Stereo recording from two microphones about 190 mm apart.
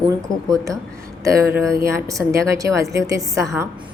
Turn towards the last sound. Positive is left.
turn(degrees=-15)  # may be behind; listen again after turning